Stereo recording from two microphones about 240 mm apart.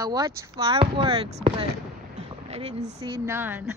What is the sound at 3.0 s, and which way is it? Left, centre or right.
Speech, centre.